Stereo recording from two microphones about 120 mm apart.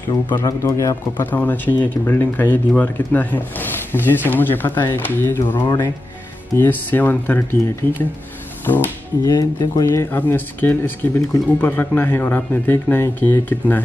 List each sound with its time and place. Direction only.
0.4 s speech: 25° left (ahead or behind)
8.6 s speech: 15° left (ahead or behind)
9.3 s speech: 35° left (ahead or behind)
9.8 s speech: 20° left (ahead or behind)